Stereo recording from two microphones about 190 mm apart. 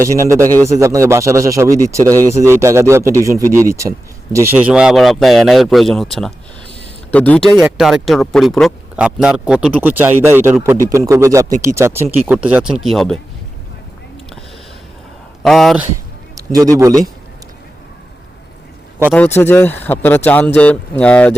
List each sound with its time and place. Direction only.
0.0 s speech: 15° right (ahead or behind)
15.4 s speech: centre (ahead or behind)
16.6 s speech: 15° right (ahead or behind)
19.1 s speech: 10° left (ahead or behind)